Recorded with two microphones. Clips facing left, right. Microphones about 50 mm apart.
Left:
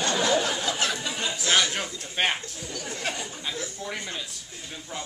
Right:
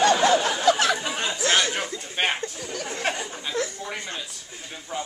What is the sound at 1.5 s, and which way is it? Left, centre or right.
Speech, centre.